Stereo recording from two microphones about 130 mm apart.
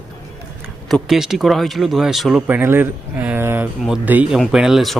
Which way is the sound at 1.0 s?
5° right (ahead or behind).